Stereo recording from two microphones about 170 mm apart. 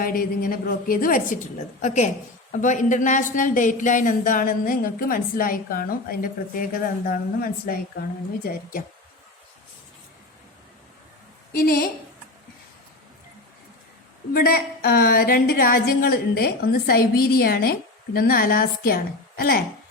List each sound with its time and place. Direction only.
0.0 s a woman's voice: 55° left (ahead or behind)
11.5 s a woman's voice: 60° left (ahead or behind)
14.3 s a woman's voice: 65° left (ahead or behind)